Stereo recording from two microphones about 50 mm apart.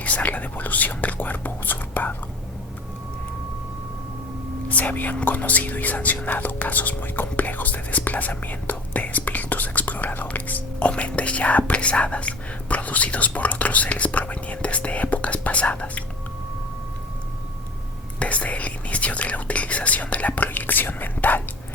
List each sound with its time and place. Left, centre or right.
0.0 s speech: left
4.7 s speech: left
18.2 s speech: left